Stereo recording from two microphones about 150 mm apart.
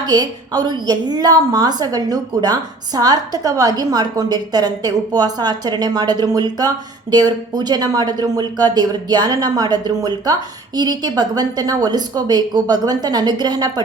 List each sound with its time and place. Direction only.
0.0 s a woman's voice: 25° right (ahead or behind)